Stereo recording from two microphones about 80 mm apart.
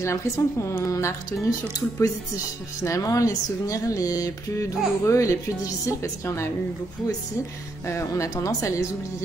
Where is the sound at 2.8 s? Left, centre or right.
Left.